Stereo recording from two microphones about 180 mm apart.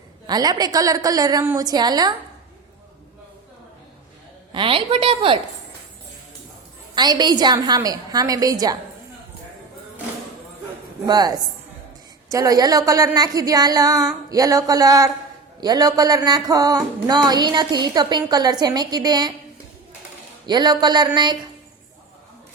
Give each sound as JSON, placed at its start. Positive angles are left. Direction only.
{"t": 0.3, "sound": "speech", "side_deg": -20}
{"t": 4.5, "sound": "speech", "side_deg": -30}
{"t": 6.9, "sound": "speech", "side_deg": -25}
{"t": 11.0, "sound": "speech", "side_deg": -20}
{"t": 20.5, "sound": "speech", "side_deg": -25}